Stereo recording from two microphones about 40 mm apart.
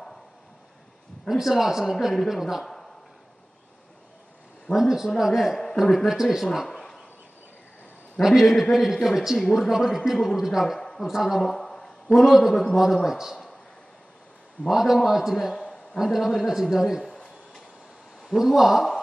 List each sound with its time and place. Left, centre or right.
1.3 s a man's voice: centre
2.6 s a sound: centre
4.7 s a man's voice: centre
8.2 s a man's voice: centre
11.4 s a sound: centre
12.1 s a man's voice: centre
14.7 s a man's voice: centre
15.6 s a sound: left
16.0 s a man's voice: centre
18.2 s a man's voice: centre